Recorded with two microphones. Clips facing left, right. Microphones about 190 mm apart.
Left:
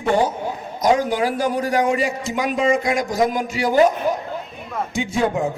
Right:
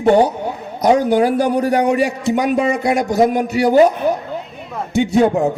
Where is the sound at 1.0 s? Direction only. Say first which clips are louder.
Right 6 dB; 60° right (ahead or behind).